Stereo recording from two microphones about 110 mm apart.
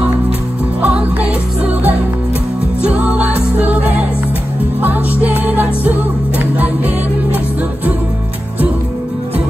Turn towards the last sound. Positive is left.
turn(degrees=-15)  # may be behind; listen again after turning